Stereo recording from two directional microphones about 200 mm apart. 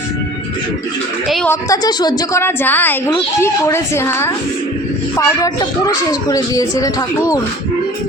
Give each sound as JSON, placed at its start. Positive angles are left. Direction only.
{"t": 1.5, "sound": "a woman's voice", "side_deg": 20}